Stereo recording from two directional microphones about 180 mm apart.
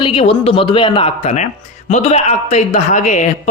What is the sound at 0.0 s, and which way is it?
Speech, 30° left (ahead or behind).